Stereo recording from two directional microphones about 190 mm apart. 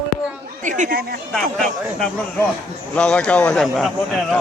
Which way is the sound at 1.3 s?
Centre (ahead or behind).